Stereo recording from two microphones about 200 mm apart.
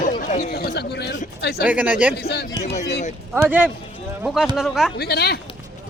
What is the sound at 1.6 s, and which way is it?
Speech, 10° right (ahead or behind).